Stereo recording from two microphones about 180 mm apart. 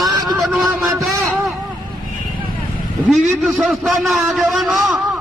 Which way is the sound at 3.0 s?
5° right (ahead or behind).